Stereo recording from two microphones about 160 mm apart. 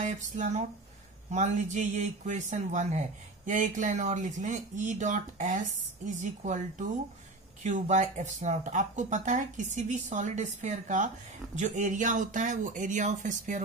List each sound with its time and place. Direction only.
0.0 s speech: 50° right (ahead or behind)